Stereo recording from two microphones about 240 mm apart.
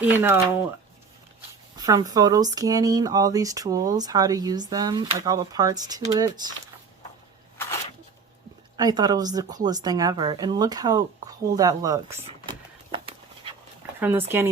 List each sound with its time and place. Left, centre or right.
0.0 s speech: centre
1.7 s speech: centre
8.7 s speech: centre
12.2 s a sound: right
14.0 s speech: centre